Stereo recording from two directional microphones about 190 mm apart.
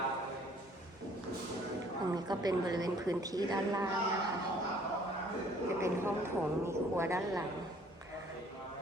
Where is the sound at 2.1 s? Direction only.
20° right (ahead or behind).